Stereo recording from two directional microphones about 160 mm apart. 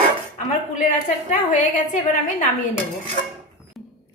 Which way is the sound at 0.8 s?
50° left (ahead or behind).